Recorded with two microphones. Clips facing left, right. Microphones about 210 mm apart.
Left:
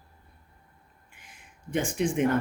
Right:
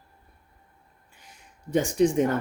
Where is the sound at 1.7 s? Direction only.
40° right (ahead or behind).